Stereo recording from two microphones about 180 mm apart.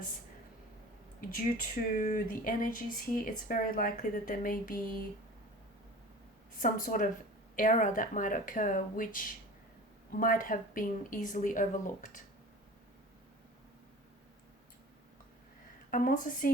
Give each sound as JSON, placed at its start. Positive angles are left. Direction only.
{"t": 1.5, "sound": "speech", "side_deg": 45}
{"t": 6.6, "sound": "speech", "side_deg": 50}
{"t": 15.9, "sound": "speech", "side_deg": 50}